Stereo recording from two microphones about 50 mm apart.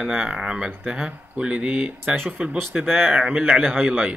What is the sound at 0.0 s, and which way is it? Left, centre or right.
Speech, centre.